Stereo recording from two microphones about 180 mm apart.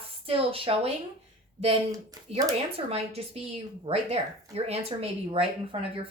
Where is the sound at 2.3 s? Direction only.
35° right (ahead or behind).